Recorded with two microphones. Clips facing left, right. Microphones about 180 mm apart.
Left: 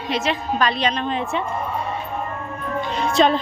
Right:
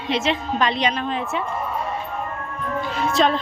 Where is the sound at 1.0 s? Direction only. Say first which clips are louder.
Left 1 dB; centre (ahead or behind).